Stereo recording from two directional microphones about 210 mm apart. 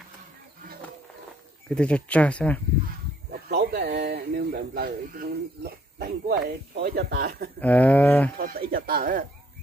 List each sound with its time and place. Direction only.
1.7 s speech: 5° left (ahead or behind)
3.3 s speech: 50° right (ahead or behind)
7.6 s a sound: 10° left (ahead or behind)
8.4 s speech: 45° right (ahead or behind)